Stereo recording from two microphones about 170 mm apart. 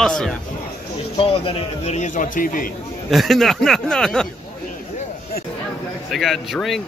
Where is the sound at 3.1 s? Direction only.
Centre (ahead or behind).